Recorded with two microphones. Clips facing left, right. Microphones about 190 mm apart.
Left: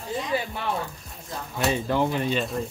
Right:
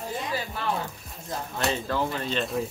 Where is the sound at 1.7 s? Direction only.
15° left (ahead or behind).